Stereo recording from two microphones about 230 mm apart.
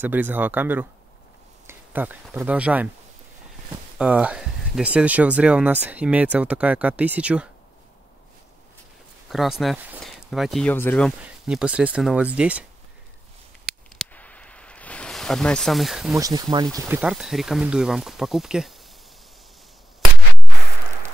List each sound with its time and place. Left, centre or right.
0.0 s speech: centre
4.0 s speech: centre
9.3 s speech: centre
13.7 s a sound: centre
16.2 s speech: centre
16.8 s speech: centre